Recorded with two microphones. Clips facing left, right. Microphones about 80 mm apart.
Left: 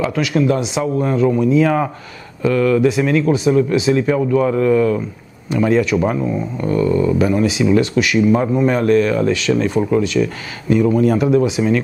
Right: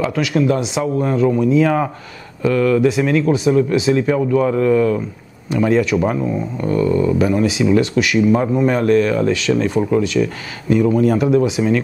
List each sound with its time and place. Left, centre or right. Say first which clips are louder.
0.0 s speech: even; left
3.4 s speech: even; left
3.9 s speech: even; centre